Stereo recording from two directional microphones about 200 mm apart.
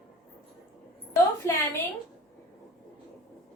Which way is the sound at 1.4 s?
15° left (ahead or behind).